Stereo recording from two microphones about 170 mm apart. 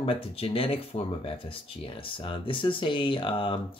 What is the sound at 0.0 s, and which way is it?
Speech, 35° left (ahead or behind).